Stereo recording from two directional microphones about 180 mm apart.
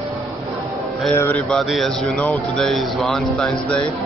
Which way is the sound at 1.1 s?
10° left (ahead or behind).